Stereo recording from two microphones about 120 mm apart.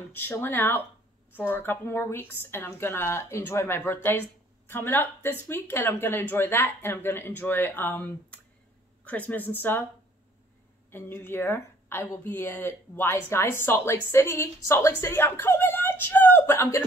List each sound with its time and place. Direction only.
0.1 s a woman's voice: 15° left (ahead or behind)
10.9 s a woman's voice: 20° left (ahead or behind)